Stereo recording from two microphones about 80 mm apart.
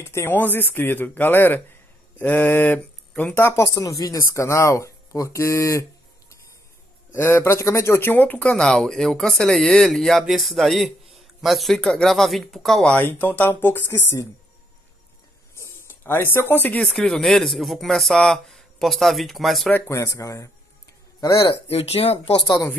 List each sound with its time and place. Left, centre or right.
0.0 s a man's voice: left; by 3.3 s centre
3.3 s speech: left
3.6 s speech: left
7.1 s speech: left
8.5 s speech: centre
12.8 s speech: left
15.5 s a sound: left
16.8 s speech: centre
19.9 s speech: left